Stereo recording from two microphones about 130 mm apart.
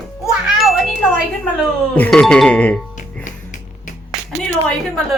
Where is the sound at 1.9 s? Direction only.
10° left (ahead or behind).